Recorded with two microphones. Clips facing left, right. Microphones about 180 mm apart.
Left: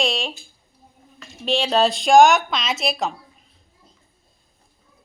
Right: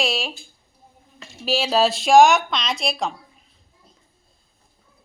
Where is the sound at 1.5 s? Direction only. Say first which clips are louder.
Left 1 dB; 5° right (ahead or behind).